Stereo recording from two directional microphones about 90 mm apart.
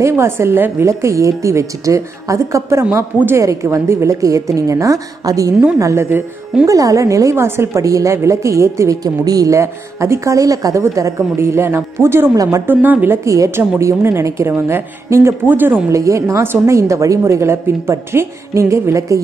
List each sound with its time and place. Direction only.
0.0 s a woman's voice: 30° right (ahead or behind)
2.8 s a woman's voice: 20° right (ahead or behind)
15.9 s a woman's voice: 35° right (ahead or behind)